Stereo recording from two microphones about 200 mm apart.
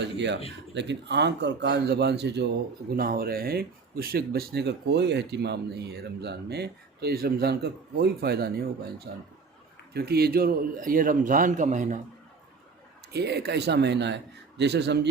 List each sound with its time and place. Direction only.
0.0 s speech: 60° right (ahead or behind)
2.9 s speech: 45° right (ahead or behind)
13.1 s speech: 55° right (ahead or behind)